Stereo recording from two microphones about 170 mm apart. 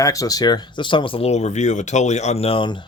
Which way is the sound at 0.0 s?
20° left (ahead or behind).